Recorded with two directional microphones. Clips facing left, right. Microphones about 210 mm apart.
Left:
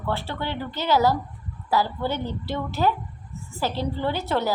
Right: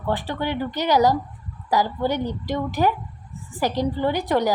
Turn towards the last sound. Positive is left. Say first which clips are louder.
# right 4 dB
turn(degrees=-15)  # may be behind; listen again after turning